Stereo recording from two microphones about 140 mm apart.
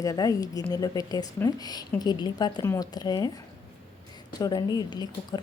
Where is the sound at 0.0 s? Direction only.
25° left (ahead or behind).